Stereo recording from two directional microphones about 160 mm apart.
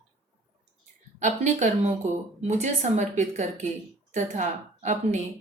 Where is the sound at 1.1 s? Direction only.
50° right (ahead or behind).